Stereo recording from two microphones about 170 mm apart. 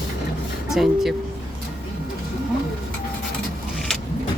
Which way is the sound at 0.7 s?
Centre (ahead or behind).